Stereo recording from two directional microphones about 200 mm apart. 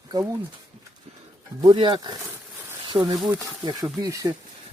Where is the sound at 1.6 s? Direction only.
25° right (ahead or behind).